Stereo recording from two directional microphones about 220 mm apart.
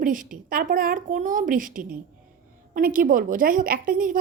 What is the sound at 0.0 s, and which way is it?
A woman's voice, 40° right (ahead or behind).